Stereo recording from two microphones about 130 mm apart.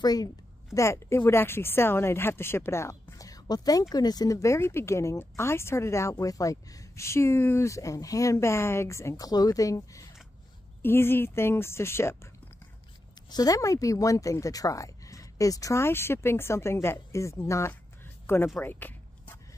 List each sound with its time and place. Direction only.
0.0 s a woman's voice: 30° left (ahead or behind)
13.3 s speech: 30° left (ahead or behind)
18.2 s a sound: 15° left (ahead or behind)